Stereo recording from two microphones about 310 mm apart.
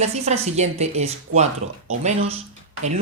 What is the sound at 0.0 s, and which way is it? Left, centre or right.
Speech, right.